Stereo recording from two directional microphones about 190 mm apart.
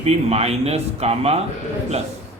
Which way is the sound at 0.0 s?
35° right (ahead or behind).